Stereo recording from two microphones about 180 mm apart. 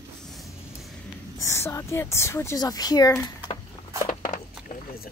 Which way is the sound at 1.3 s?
15° left (ahead or behind).